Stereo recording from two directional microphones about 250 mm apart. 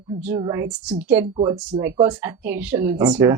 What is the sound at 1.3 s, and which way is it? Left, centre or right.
Speech, centre.